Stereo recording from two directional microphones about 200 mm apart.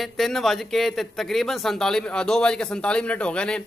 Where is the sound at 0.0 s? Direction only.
Centre (ahead or behind).